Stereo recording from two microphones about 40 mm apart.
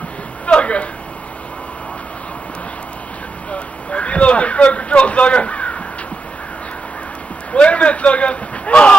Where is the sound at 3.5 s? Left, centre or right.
Left.